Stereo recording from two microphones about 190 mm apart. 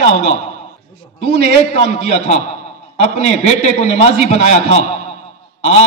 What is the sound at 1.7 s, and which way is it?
A man's voice, 35° left (ahead or behind).